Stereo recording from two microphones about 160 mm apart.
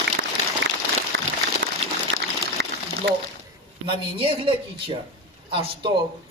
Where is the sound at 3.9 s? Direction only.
35° right (ahead or behind).